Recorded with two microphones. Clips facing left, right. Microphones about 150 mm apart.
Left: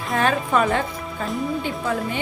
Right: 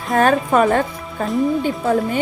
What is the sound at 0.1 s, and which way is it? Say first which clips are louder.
A woman's voice: right 5 dB; 45° right (ahead or behind).